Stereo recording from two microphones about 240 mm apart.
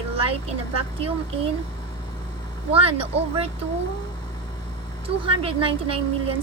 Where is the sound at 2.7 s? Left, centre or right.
Right.